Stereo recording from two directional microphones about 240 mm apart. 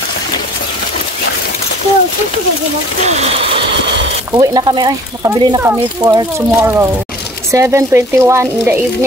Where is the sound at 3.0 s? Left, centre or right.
Right.